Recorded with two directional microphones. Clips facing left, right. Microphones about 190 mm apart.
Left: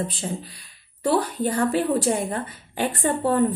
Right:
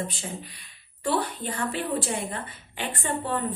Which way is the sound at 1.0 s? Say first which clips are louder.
Left 6 dB; 40° left (ahead or behind).